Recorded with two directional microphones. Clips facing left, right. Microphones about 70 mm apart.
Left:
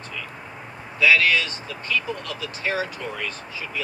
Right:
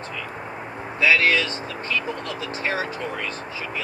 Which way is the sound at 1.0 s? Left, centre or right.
Right.